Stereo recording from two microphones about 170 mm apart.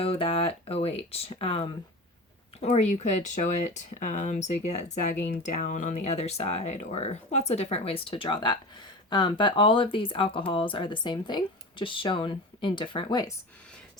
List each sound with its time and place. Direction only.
0.0 s speech: 35° left (ahead or behind)